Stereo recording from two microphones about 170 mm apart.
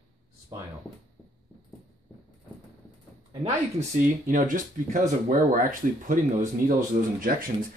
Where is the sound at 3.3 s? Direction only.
30° right (ahead or behind).